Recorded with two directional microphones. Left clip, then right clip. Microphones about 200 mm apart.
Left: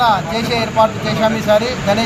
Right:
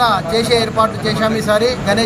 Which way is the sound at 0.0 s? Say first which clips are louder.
Even; 15° right (ahead or behind).